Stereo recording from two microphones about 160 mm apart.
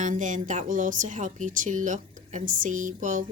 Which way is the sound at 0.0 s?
50° right (ahead or behind).